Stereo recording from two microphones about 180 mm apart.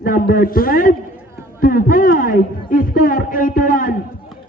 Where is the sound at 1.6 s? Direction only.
50° left (ahead or behind).